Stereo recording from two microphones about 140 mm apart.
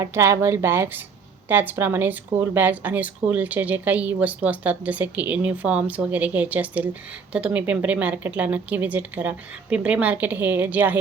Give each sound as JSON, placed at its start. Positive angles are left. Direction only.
{"t": 0.0, "sound": "a woman's voice", "side_deg": -20}